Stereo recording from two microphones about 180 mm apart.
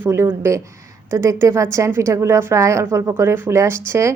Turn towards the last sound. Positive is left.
turn(degrees=-15)  # may be behind; listen again after turning